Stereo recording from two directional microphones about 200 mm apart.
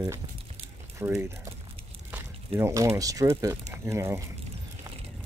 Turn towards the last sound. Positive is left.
turn(degrees=-15)  # may be behind; listen again after turning